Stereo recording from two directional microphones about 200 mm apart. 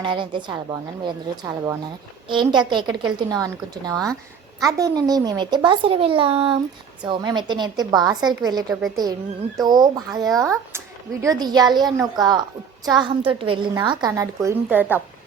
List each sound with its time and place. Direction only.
0.0 s speech: 25° right (ahead or behind)